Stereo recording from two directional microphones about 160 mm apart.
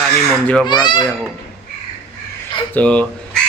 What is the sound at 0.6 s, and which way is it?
Speech, 30° left (ahead or behind).